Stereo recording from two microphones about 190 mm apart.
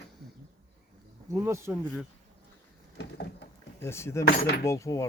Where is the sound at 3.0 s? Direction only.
60° left (ahead or behind).